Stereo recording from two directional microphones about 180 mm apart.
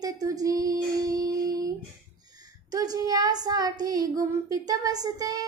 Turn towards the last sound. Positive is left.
turn(degrees=-20)  # may be behind; listen again after turning